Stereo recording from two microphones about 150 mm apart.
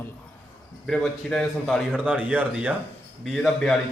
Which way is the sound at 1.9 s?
10° right (ahead or behind).